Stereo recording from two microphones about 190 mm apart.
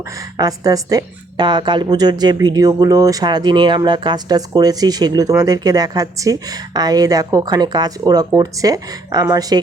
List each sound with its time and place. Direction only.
0.0 s a woman's voice: 20° right (ahead or behind)